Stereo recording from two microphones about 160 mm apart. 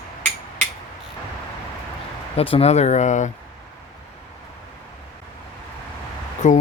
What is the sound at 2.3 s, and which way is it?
Speech, 35° left (ahead or behind).